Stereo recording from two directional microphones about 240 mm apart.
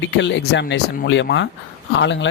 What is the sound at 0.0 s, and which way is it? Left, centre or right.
Speech, left.